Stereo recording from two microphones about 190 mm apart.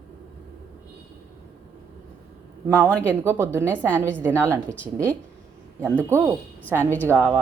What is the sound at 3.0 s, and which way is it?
A woman's voice, 15° right (ahead or behind).